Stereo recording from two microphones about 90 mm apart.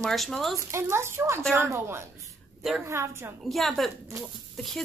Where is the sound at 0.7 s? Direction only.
30° right (ahead or behind).